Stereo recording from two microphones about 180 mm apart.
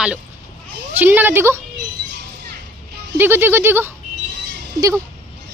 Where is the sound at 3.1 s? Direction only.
10° right (ahead or behind).